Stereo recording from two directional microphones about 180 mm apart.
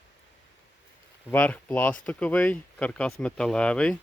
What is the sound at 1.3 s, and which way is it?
Speech, 10° left (ahead or behind).